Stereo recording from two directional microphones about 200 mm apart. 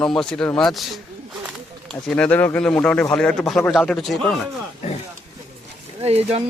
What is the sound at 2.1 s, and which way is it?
Speech, 5° left (ahead or behind).